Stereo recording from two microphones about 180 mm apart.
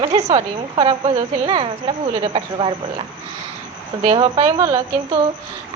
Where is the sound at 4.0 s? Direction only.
30° right (ahead or behind).